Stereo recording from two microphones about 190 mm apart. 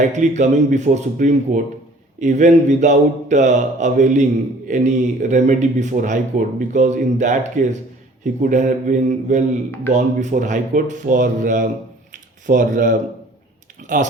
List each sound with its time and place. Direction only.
0.0 s a man's voice: 40° right (ahead or behind)